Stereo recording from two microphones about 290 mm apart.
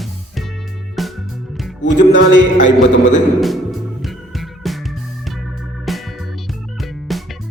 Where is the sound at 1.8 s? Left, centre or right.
Left.